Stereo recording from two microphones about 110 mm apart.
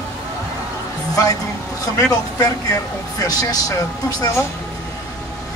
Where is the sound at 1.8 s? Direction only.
35° left (ahead or behind).